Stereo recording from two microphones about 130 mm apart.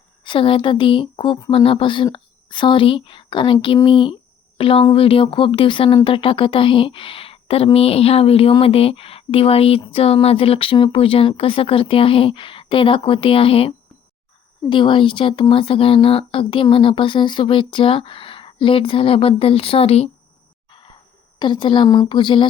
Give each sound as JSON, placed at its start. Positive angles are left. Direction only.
{"t": 0.3, "sound": "a woman's voice", "side_deg": 40}
{"t": 21.3, "sound": "a woman's voice", "side_deg": 35}